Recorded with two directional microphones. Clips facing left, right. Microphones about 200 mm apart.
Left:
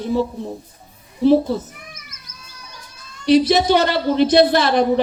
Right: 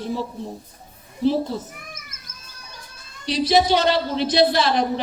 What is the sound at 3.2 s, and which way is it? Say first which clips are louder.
A woman's voice: left 5 dB; 55° left (ahead or behind).